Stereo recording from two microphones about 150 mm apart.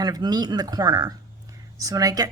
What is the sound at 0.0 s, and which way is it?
A woman's voice, 25° right (ahead or behind).